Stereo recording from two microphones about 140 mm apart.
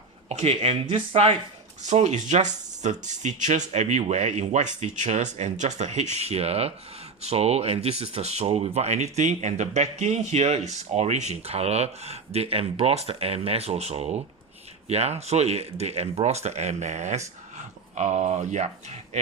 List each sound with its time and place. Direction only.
0.3 s speech: 50° right (ahead or behind)
1.8 s speech: 55° right (ahead or behind)